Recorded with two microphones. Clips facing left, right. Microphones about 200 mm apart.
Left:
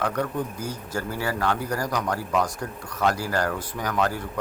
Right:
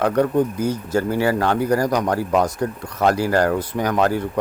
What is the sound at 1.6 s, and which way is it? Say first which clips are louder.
Speech: right 10 dB; 70° right (ahead or behind).